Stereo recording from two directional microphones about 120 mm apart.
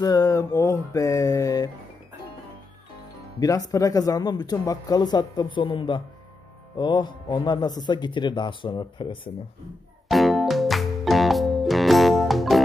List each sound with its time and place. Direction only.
0.0 s mantra: 30° left (ahead or behind)
3.3 s speech: 30° left (ahead or behind)
10.0 s music: centre (ahead or behind)